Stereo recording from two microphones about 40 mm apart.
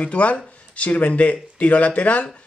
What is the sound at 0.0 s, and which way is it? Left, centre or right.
Speech, left.